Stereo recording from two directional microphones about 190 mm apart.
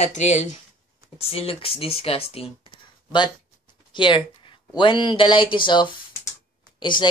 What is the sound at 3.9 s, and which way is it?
Speech, 25° left (ahead or behind).